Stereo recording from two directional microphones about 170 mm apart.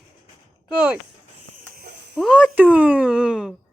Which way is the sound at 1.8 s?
75° right (ahead or behind).